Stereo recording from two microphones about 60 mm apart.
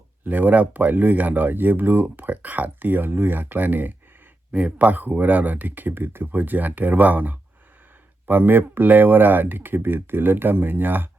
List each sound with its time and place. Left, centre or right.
0.3 s speech: right